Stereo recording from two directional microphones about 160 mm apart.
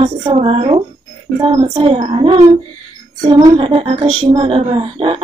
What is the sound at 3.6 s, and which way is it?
A woman's voice, 35° right (ahead or behind).